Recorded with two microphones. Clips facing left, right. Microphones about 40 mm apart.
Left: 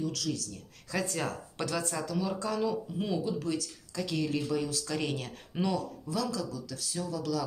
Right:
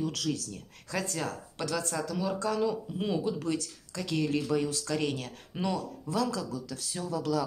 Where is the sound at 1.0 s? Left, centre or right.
Centre.